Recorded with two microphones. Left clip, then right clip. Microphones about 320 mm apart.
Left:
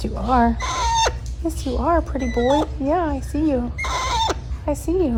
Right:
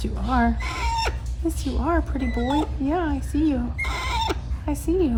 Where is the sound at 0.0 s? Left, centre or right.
Centre.